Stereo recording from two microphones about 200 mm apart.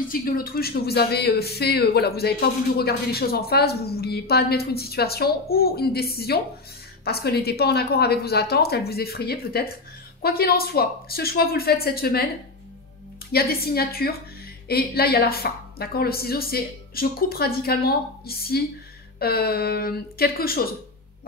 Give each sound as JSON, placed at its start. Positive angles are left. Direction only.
{"t": 0.1, "sound": "a man's voice", "side_deg": 45}
{"t": 13.3, "sound": "a man's voice", "side_deg": 50}